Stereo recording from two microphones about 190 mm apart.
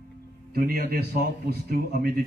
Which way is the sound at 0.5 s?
55° right (ahead or behind).